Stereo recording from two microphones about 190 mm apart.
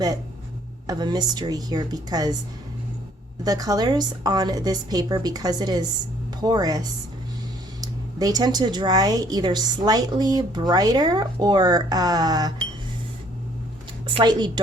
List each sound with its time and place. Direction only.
0.9 s speech: 20° right (ahead or behind)
3.4 s speech: 20° right (ahead or behind)
14.1 s speech: 25° right (ahead or behind)